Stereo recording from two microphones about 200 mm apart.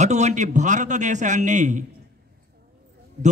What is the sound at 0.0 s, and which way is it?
Speech, 35° right (ahead or behind).